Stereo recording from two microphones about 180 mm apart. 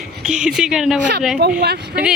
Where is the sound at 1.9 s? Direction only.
5° right (ahead or behind).